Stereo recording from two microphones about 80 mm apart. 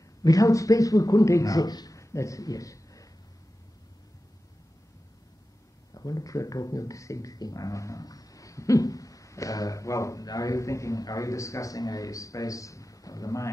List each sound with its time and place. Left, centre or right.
0.2 s speech: left
2.0 s a sound: left
5.9 s speech: left